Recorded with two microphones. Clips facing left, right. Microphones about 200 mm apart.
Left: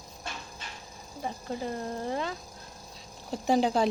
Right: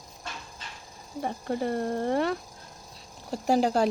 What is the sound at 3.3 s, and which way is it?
Speech, 5° right (ahead or behind).